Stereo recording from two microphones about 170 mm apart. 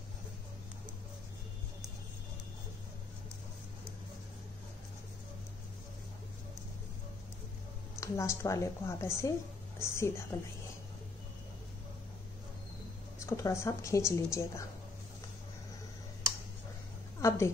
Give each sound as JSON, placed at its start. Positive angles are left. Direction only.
{"t": 8.0, "sound": "speech", "side_deg": 15}
{"t": 13.2, "sound": "speech", "side_deg": 15}
{"t": 17.2, "sound": "a sound", "side_deg": 15}